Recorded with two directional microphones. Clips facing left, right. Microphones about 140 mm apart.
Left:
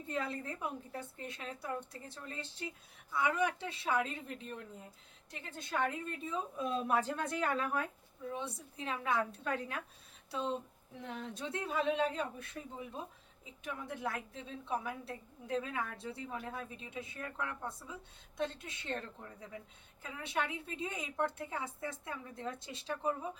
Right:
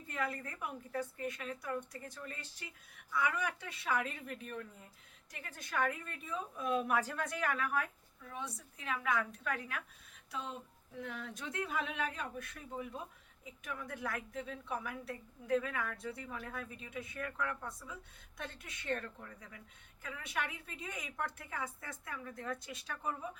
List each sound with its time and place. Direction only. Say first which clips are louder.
0.1 s a woman's voice: left 1 dB; 25° left (ahead or behind)